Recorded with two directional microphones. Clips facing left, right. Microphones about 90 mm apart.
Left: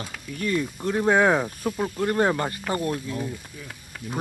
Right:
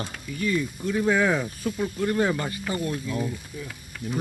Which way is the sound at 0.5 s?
65° left (ahead or behind).